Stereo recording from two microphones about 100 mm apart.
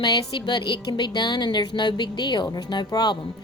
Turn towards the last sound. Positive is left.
turn(degrees=45)  # may be behind; listen again after turning